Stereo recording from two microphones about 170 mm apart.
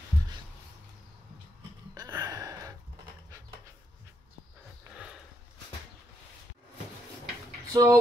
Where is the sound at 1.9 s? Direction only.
20° right (ahead or behind).